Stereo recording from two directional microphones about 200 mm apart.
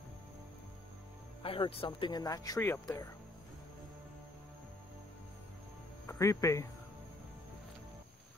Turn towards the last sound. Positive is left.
turn(degrees=15)  # may be behind; listen again after turning